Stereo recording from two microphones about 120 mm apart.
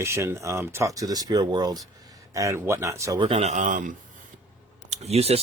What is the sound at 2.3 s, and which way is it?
Speech, 25° right (ahead or behind).